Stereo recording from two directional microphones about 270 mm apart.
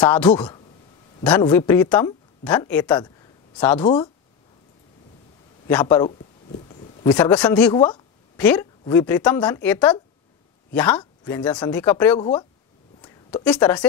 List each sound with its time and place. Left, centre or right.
0.1 s speech: centre
3.8 s speech: centre
5.7 s speech: centre
6.5 s a sound: left
7.2 s speech: centre
7.7 s speech: centre
8.4 s a woman's voice: centre
13.4 s speech: centre